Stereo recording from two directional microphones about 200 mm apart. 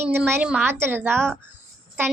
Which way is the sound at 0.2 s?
10° right (ahead or behind).